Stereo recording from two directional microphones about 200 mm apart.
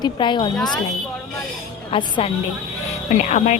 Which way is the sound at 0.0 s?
25° left (ahead or behind).